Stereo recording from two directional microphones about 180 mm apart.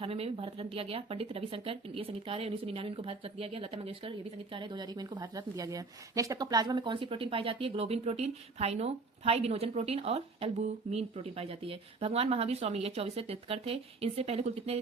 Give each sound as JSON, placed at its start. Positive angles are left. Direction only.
{"t": 0.0, "sound": "a woman's voice", "side_deg": -35}